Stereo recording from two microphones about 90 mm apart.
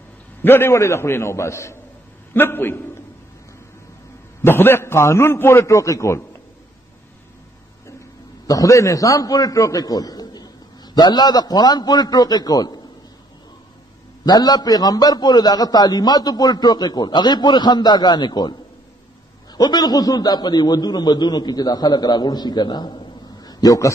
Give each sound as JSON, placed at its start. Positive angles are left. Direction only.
{"t": 0.4, "sound": "a man's voice", "side_deg": 25}
{"t": 4.4, "sound": "a man's voice", "side_deg": 25}
{"t": 8.5, "sound": "a man's voice", "side_deg": 40}
{"t": 14.2, "sound": "a man's voice", "side_deg": 50}